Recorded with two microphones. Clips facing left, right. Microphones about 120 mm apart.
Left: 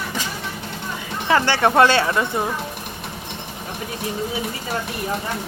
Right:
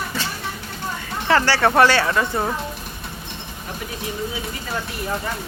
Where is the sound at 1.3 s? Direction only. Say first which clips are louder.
Even; 20° left (ahead or behind).